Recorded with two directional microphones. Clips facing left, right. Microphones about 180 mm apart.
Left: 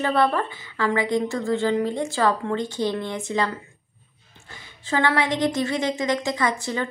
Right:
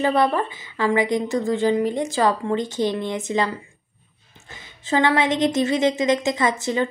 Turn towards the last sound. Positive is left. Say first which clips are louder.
# right 3 dB
turn(degrees=-20)  # may be behind; listen again after turning